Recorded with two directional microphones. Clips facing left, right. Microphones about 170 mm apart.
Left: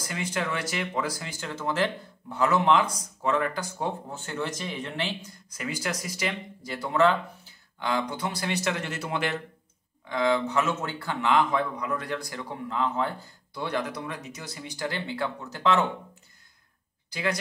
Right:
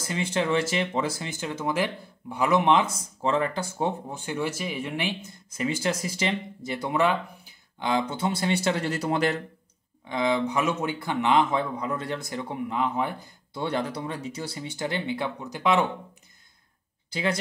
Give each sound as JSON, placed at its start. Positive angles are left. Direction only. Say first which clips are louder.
{"t": 0.0, "sound": "speech", "louder": "right 4 dB", "side_deg": -25}
{"t": 4.1, "sound": "speech", "louder": "right 3 dB", "side_deg": -15}
{"t": 5.2, "sound": "speech", "louder": "right 6 dB", "side_deg": -25}
{"t": 10.0, "sound": "speech", "louder": "even", "side_deg": -20}
{"t": 13.6, "sound": "speech", "louder": "right 2 dB", "side_deg": -30}
{"t": 17.1, "sound": "speech", "louder": "right 2 dB", "side_deg": -25}